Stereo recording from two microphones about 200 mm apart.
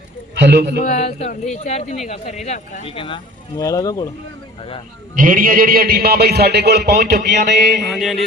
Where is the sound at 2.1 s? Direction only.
35° left (ahead or behind).